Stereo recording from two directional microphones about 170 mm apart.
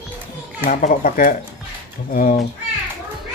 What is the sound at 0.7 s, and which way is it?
A child's voice, 50° left (ahead or behind).